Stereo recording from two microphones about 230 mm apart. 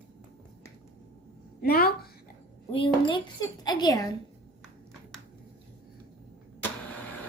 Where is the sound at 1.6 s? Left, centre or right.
Left.